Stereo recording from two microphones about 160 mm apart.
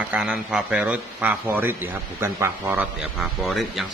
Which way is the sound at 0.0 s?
10° right (ahead or behind).